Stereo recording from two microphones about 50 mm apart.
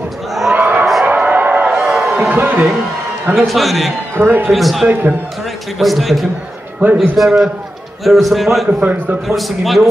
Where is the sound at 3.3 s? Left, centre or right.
Centre.